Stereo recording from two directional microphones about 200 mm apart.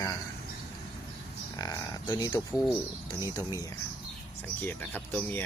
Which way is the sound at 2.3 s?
10° left (ahead or behind).